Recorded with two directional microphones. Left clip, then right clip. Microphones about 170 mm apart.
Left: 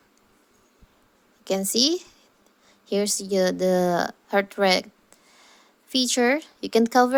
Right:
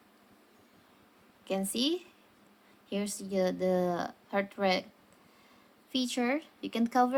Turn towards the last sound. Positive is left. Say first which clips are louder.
# left 9 dB
turn(degrees=45)  # may be behind; listen again after turning